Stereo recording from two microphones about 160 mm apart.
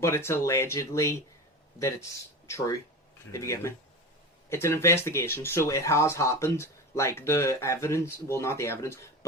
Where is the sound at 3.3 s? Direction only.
20° left (ahead or behind).